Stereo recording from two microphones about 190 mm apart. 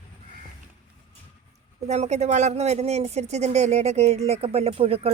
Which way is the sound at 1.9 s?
35° right (ahead or behind).